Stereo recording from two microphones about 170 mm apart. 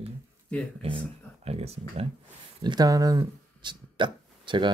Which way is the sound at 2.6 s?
25° right (ahead or behind).